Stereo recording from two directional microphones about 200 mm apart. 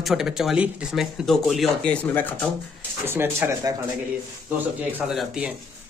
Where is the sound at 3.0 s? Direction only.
10° right (ahead or behind).